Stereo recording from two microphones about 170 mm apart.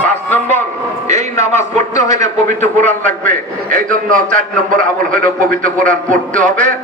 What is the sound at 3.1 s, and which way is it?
A man's voice, 50° right (ahead or behind).